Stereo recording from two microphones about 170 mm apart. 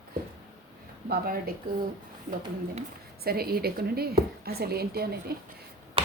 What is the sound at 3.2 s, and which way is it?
A woman's voice, 65° right (ahead or behind).